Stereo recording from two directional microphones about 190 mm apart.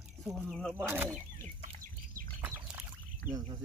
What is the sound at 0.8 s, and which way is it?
Speech, 10° right (ahead or behind).